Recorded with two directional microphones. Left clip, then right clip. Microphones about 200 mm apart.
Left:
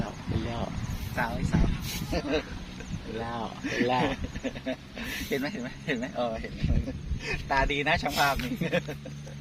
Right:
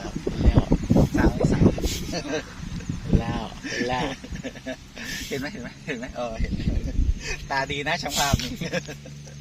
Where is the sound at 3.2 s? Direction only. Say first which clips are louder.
Right 2 dB; 20° right (ahead or behind).